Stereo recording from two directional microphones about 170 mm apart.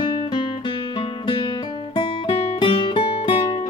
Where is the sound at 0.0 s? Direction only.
25° left (ahead or behind).